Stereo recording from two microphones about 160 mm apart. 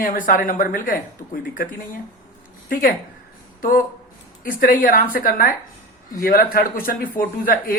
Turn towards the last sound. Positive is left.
turn(degrees=65)  # may be behind; listen again after turning